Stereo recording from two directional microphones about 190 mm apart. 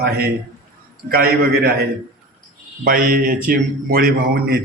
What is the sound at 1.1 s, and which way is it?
Speech, 55° right (ahead or behind).